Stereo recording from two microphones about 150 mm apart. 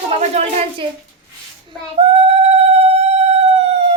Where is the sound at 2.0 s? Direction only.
40° right (ahead or behind).